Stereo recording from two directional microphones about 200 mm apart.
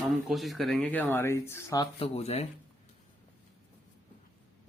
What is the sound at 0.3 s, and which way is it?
Speech, centre (ahead or behind).